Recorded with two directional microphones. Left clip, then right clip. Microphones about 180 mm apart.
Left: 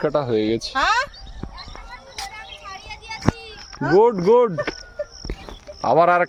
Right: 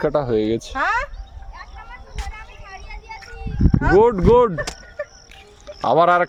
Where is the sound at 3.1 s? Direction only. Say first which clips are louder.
Left 11 dB; centre (ahead or behind).